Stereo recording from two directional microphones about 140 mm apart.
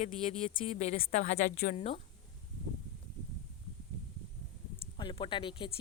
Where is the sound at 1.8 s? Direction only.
45° left (ahead or behind).